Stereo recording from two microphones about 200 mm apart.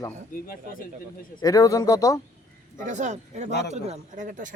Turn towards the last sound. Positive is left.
turn(degrees=-40)  # may be behind; listen again after turning